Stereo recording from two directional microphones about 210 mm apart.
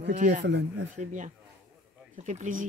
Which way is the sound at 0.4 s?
55° right (ahead or behind).